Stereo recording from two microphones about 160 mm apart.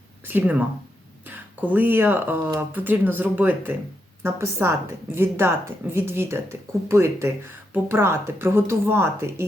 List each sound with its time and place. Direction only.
0.3 s speech: 10° right (ahead or behind)
1.6 s speech: 10° right (ahead or behind)